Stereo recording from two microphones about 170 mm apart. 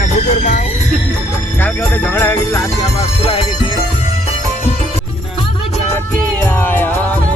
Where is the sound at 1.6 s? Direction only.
10° left (ahead or behind).